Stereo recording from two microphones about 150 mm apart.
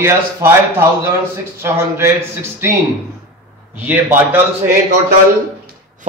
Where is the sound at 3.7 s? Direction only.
10° right (ahead or behind).